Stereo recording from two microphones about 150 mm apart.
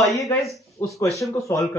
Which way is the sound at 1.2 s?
20° left (ahead or behind).